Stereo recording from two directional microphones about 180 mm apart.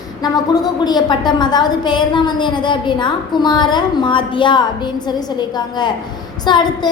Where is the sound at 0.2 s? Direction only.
20° left (ahead or behind).